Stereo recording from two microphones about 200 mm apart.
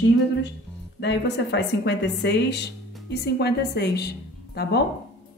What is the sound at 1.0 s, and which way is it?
Speech, 60° left (ahead or behind).